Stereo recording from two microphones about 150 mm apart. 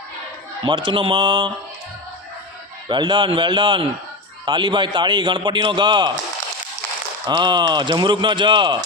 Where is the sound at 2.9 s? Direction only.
30° right (ahead or behind).